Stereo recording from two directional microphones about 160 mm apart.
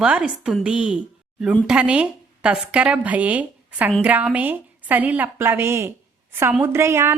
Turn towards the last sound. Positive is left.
turn(degrees=-15)  # may be behind; listen again after turning